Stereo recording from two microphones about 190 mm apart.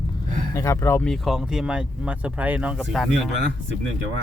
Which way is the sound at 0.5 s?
15° left (ahead or behind).